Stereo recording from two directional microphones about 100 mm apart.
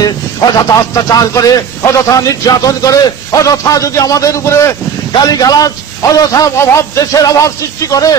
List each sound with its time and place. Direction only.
0.6 s speech: 35° left (ahead or behind)